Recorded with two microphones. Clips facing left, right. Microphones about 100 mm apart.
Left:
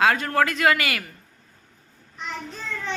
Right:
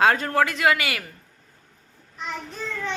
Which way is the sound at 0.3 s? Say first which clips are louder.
Even; 20° right (ahead or behind).